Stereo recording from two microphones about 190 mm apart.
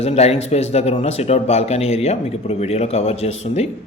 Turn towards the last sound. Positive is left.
turn(degrees=35)  # may be behind; listen again after turning